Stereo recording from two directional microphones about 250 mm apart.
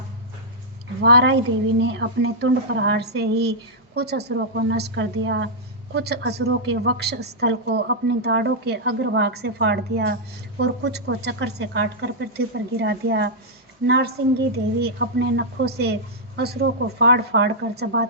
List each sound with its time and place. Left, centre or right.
1.0 s a woman's voice: right